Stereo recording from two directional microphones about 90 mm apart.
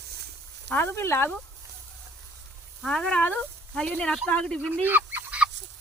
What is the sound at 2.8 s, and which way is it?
Speech, 5° left (ahead or behind).